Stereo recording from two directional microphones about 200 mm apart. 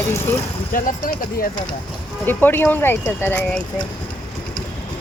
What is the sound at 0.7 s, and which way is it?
Speech, 45° left (ahead or behind).